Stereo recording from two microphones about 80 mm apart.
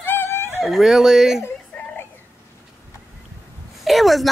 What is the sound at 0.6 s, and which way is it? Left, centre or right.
Speech, centre.